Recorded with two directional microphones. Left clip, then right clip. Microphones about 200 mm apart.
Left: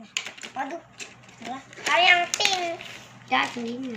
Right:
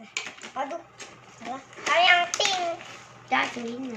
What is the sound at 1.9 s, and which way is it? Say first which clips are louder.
Speech: left 1 dB; 10° right (ahead or behind).